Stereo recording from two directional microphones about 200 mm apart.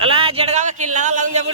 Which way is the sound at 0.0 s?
25° right (ahead or behind).